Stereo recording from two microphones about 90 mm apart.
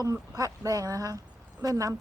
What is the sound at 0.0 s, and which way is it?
Speech, 40° right (ahead or behind).